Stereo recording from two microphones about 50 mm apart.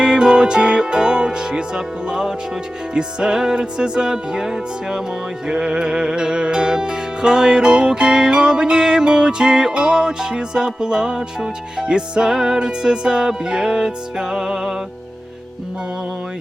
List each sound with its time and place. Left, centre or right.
0.0 s music: centre